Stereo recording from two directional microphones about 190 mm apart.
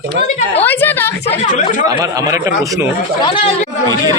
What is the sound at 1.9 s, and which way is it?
Speech, 20° right (ahead or behind).